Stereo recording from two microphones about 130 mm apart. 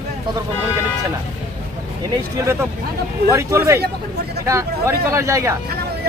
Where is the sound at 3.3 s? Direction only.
20° right (ahead or behind).